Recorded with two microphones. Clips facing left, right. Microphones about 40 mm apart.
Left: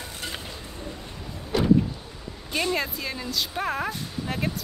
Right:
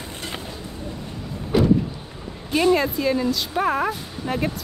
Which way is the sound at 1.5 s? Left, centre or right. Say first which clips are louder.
Right 6 dB; centre.